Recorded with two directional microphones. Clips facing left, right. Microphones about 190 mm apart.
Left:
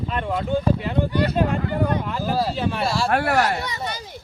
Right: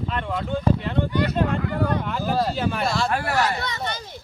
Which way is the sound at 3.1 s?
60° left (ahead or behind).